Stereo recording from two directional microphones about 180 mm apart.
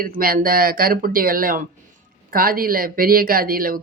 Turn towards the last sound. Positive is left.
turn(degrees=-55)  # may be behind; listen again after turning